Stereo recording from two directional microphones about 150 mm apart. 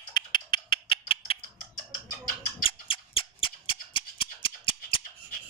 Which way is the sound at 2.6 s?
35° left (ahead or behind).